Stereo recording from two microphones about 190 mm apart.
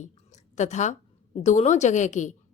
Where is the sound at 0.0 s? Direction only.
40° left (ahead or behind).